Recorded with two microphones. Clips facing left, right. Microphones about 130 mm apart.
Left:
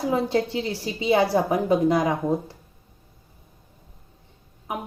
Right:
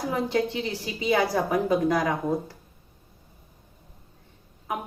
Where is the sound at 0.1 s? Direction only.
30° left (ahead or behind).